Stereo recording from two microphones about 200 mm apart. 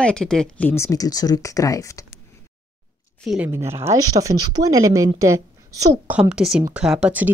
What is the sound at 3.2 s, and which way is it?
Speech, centre (ahead or behind).